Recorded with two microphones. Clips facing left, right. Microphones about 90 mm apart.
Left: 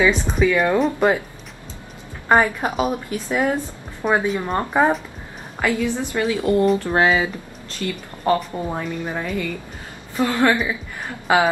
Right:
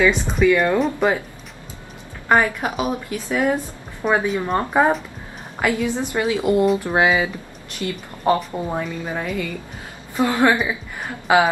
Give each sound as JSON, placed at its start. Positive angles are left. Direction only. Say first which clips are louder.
{"t": 0.0, "sound": "speech", "louder": "right 1 dB", "side_deg": 0}
{"t": 2.2, "sound": "a woman's voice", "louder": "left 1 dB", "side_deg": 20}
{"t": 4.3, "sound": "speech", "louder": "right 1 dB", "side_deg": 0}
{"t": 5.6, "sound": "a woman's voice", "louder": "even", "side_deg": -20}